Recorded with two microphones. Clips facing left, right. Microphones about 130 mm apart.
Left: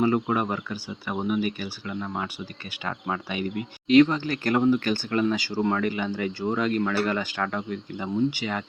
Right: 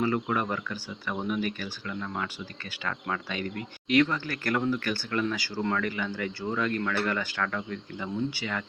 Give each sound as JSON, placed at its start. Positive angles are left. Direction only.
{"t": 0.0, "sound": "speech", "side_deg": 20}